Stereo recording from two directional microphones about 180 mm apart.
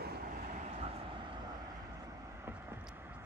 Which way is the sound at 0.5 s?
35° right (ahead or behind).